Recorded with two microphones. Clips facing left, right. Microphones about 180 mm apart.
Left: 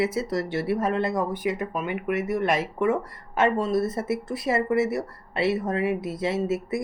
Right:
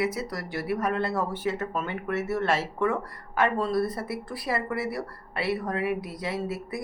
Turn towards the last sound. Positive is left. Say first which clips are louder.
# left 6 dB
turn(degrees=25)  # may be behind; listen again after turning